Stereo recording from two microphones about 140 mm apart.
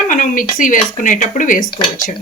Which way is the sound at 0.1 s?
70° left (ahead or behind).